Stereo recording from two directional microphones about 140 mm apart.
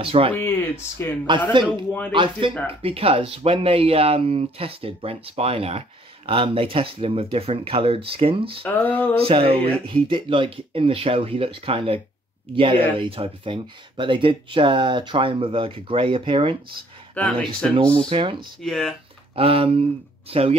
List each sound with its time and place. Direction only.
0.0 s speech: 40° right (ahead or behind)
0.3 s speech: 15° left (ahead or behind)
2.4 s speech: 35° right (ahead or behind)
8.6 s speech: 10° left (ahead or behind)
9.2 s speech: 40° right (ahead or behind)
17.1 s speech: 10° left (ahead or behind)
17.7 s speech: 40° right (ahead or behind)
18.6 s speech: centre (ahead or behind)
19.3 s speech: 40° right (ahead or behind)